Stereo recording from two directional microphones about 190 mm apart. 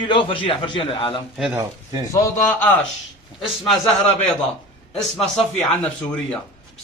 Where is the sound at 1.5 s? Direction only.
20° right (ahead or behind).